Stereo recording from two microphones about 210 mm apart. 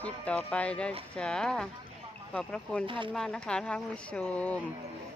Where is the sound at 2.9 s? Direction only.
25° right (ahead or behind).